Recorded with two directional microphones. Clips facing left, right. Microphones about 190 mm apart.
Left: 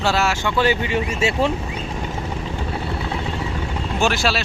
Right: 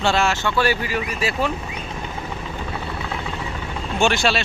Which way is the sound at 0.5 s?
20° left (ahead or behind).